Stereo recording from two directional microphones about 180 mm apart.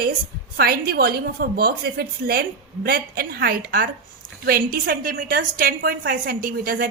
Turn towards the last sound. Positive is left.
turn(degrees=-55)  # may be behind; listen again after turning